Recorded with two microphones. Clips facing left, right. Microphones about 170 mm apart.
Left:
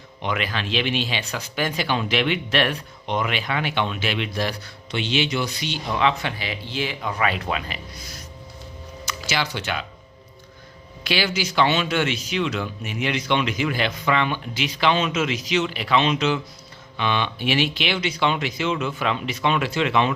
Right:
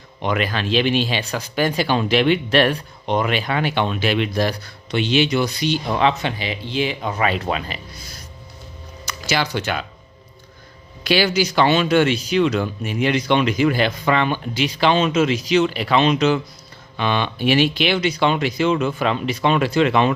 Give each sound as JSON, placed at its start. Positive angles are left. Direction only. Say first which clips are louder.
{"t": 0.2, "sound": "speech", "louder": "right 5 dB", "side_deg": -40}
{"t": 6.1, "sound": "speech", "louder": "right 4 dB", "side_deg": -20}
{"t": 11.0, "sound": "speech", "louder": "right 6 dB", "side_deg": -40}